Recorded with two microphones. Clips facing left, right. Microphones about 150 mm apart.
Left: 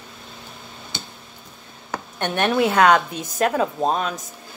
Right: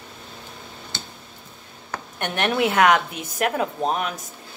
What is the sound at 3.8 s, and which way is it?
Speech, 20° left (ahead or behind).